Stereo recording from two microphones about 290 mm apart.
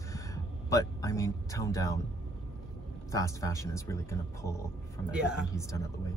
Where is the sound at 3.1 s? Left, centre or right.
Centre.